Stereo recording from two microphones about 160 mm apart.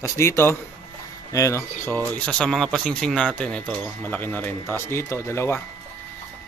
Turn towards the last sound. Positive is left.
turn(degrees=15)  # may be behind; listen again after turning